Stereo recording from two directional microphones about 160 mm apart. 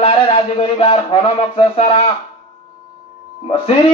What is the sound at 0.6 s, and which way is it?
Speech, 35° left (ahead or behind).